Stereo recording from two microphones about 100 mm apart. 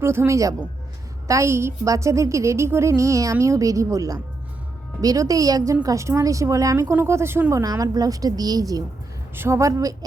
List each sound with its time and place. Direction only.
0.0 s a woman's voice: 25° right (ahead or behind)
7.6 s speech: 40° right (ahead or behind)
9.3 s speech: 25° right (ahead or behind)